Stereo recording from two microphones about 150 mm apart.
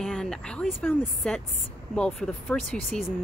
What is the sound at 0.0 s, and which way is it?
Speech, 5° left (ahead or behind).